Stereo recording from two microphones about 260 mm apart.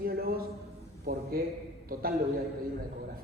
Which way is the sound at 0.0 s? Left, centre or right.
Right.